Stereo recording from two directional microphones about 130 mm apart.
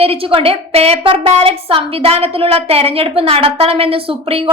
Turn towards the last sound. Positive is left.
turn(degrees=-45)  # may be behind; listen again after turning